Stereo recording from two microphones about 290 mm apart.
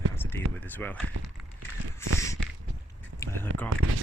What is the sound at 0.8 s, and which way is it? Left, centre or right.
Speech, centre.